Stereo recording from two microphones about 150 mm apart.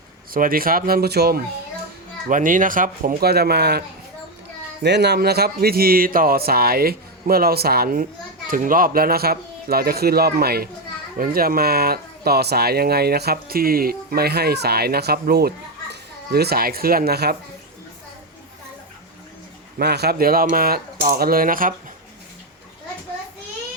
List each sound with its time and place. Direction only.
0.3 s speech: 75° right (ahead or behind); by 1.4 s 90° right
2.3 s speech: 65° right (ahead or behind); by 8.0 s 80° right
8.4 s speech: 65° right (ahead or behind); by 17.3 s 90° right
19.8 s speech: 90° right; by 21.7 s 70° right (ahead or behind)